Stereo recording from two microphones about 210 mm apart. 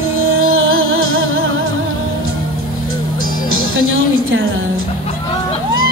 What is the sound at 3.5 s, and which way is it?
Music, 75° right (ahead or behind).